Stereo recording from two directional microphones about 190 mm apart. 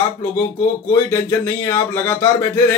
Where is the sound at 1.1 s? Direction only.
10° left (ahead or behind).